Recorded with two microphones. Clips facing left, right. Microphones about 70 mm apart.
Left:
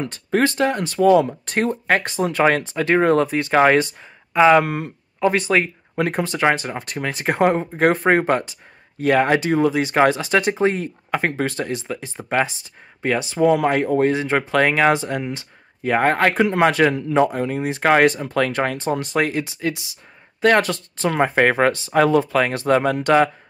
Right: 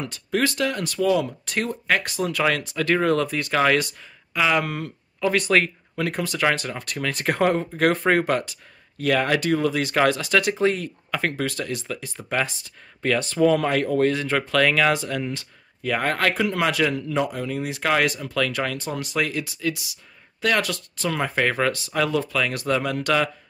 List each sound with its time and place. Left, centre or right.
0.0 s speech: left